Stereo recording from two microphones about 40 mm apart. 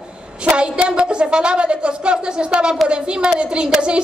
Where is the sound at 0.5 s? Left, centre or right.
Right.